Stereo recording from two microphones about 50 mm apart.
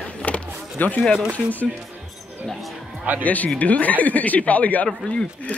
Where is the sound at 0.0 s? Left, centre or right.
Left.